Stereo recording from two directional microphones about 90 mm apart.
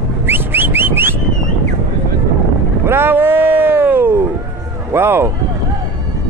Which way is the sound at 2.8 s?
25° right (ahead or behind).